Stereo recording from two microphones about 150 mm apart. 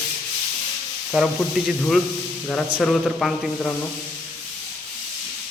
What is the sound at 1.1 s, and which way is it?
A man's voice, centre (ahead or behind).